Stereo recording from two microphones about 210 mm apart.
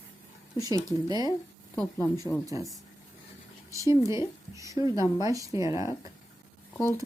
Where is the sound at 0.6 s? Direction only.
15° right (ahead or behind).